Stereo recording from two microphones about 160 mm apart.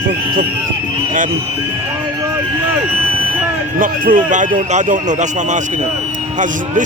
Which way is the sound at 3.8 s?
55° right (ahead or behind).